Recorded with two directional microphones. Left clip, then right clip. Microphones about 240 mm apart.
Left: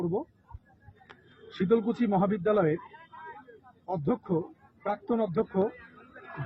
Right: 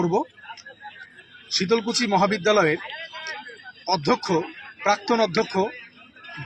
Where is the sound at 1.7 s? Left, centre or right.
Centre.